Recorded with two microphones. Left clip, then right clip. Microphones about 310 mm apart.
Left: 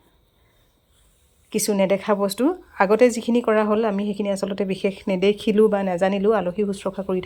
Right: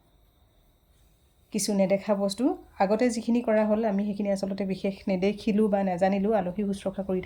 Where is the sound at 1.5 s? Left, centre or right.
Centre.